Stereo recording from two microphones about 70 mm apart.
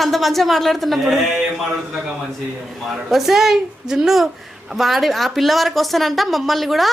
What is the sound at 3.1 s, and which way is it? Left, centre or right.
A woman's voice, centre.